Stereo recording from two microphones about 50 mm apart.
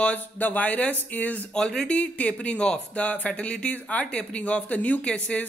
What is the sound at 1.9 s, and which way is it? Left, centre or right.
Speech, left.